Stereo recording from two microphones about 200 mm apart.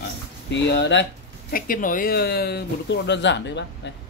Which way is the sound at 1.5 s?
45° left (ahead or behind).